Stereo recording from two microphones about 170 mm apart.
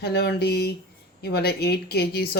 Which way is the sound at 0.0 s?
70° left (ahead or behind).